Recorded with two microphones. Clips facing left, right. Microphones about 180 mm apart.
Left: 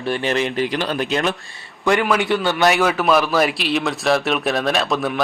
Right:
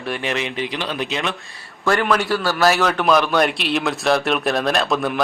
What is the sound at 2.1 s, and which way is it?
Speech, 20° left (ahead or behind).